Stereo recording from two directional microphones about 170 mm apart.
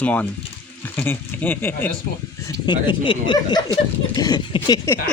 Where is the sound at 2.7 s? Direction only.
30° left (ahead or behind).